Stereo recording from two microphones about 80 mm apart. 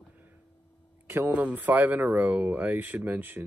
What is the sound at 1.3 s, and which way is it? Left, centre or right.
Speech, centre.